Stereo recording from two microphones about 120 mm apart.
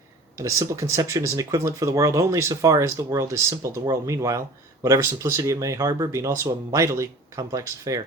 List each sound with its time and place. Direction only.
0.3 s speech: 25° right (ahead or behind)